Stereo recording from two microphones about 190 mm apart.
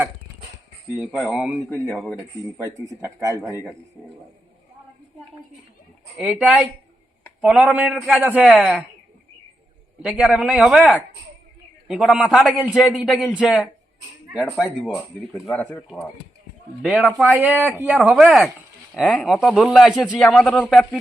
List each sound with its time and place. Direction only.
1.3 s speech: 5° right (ahead or behind)
2.6 s a man's voice: 15° right (ahead or behind)
6.1 s a man's voice: 10° right (ahead or behind)
7.4 s a man's voice: 5° right (ahead or behind)
10.0 s speech: 5° right (ahead or behind)
16.8 s a man's voice: centre (ahead or behind)